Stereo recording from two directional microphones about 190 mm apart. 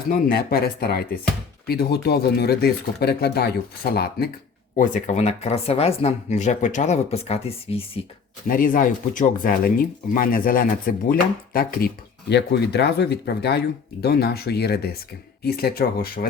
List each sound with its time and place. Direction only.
0.3 s speech: 55° left (ahead or behind)
4.8 s speech: 40° left (ahead or behind)
8.4 s speech: 45° left (ahead or behind)
12.3 s speech: 60° left (ahead or behind)